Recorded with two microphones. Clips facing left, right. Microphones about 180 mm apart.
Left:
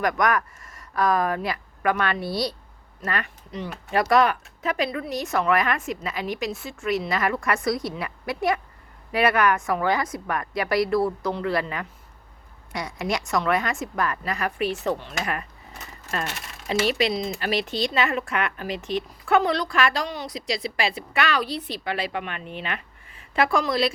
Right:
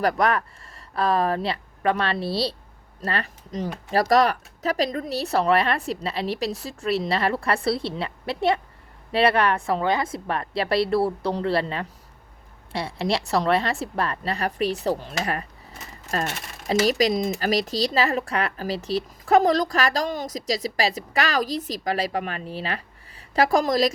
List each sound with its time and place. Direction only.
0.0 s a woman's voice: 30° right (ahead or behind)